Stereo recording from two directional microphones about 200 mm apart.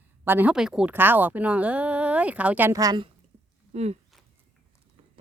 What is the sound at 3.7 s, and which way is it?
Speech, 35° right (ahead or behind).